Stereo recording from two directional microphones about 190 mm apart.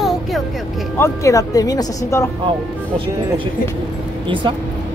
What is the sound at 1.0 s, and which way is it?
Speech, 15° left (ahead or behind).